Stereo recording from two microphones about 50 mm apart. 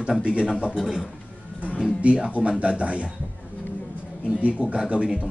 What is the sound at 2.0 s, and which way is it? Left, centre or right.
Speech, right.